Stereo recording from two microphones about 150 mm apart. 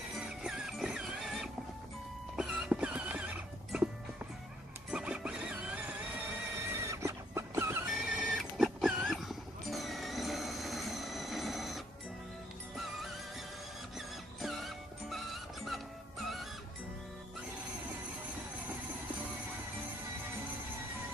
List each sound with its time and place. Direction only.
0.2 s music: 5° right (ahead or behind)
4.9 s music: 5° right (ahead or behind)
6.6 s horse: 20° right (ahead or behind)
7.9 s music: 5° right (ahead or behind)
9.6 s a sound: centre (ahead or behind)
14.4 s music: centre (ahead or behind)